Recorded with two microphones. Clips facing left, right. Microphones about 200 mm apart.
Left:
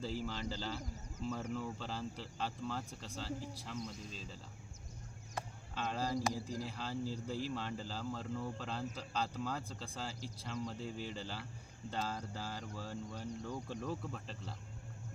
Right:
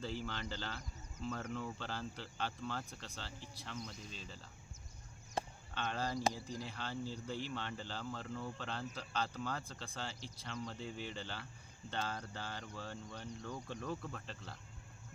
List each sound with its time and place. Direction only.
0.0 s speech: 5° left (ahead or behind)
5.4 s sheep: 30° right (ahead or behind)
5.7 s speech: 5° left (ahead or behind)